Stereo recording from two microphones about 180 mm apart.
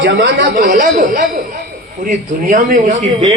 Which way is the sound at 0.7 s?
45° right (ahead or behind).